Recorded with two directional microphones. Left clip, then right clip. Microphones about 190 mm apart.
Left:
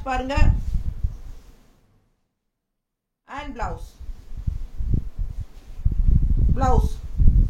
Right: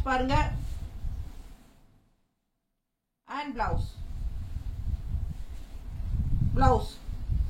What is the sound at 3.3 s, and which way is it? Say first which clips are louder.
Speech: even; 15° left (ahead or behind).